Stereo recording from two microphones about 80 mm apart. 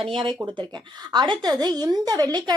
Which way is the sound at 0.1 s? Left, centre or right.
Right.